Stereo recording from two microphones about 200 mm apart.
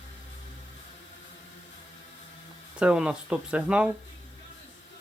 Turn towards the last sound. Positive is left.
turn(degrees=-5)  # may be behind; listen again after turning